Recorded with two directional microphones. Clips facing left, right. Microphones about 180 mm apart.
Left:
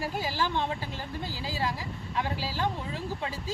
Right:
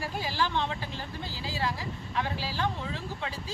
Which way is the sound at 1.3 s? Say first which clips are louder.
Left 1 dB; 45° left (ahead or behind).